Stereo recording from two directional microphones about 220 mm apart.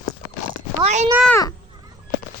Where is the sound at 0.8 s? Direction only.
30° right (ahead or behind).